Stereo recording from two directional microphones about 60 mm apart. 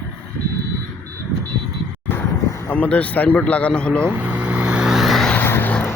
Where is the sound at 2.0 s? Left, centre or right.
Left.